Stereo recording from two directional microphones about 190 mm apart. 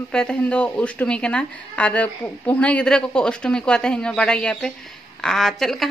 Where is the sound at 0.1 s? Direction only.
5° left (ahead or behind).